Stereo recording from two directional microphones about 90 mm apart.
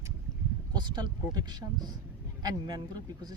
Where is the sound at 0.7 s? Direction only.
55° right (ahead or behind).